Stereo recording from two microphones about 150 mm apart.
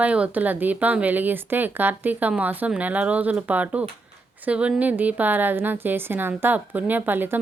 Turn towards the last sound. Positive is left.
turn(degrees=-15)  # may be behind; listen again after turning